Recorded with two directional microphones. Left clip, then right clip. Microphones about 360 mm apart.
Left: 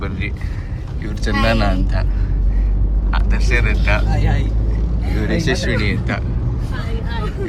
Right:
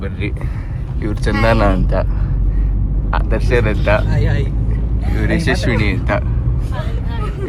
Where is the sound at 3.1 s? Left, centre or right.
Centre.